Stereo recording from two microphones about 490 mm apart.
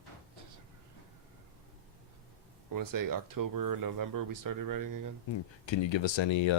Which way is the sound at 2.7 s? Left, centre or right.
Right.